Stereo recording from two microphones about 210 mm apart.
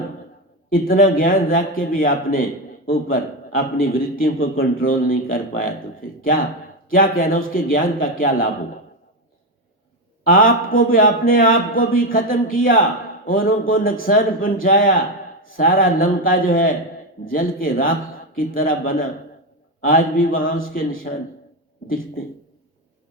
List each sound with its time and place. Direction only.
0.7 s speech: 45° left (ahead or behind)
10.2 s a man's voice: 40° left (ahead or behind)